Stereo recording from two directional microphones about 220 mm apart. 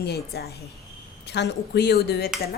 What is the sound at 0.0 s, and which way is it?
A woman's voice, 45° left (ahead or behind).